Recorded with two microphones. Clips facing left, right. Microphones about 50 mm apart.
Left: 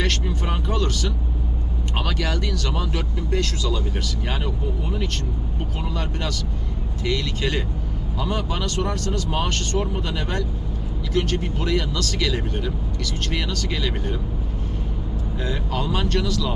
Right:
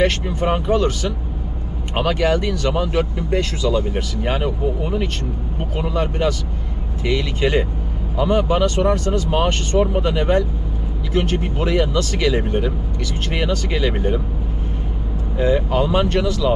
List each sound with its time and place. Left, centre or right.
0.0 s speech: right
15.4 s speech: right